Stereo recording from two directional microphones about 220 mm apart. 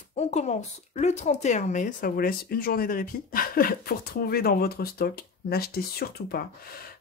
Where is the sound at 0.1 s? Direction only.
30° left (ahead or behind).